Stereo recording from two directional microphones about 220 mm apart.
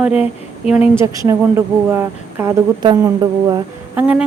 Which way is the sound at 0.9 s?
15° right (ahead or behind).